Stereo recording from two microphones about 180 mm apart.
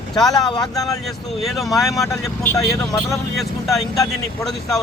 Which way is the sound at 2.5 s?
20° left (ahead or behind).